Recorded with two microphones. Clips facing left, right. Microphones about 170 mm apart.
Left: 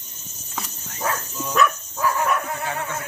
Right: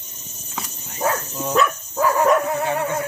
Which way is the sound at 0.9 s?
30° right (ahead or behind).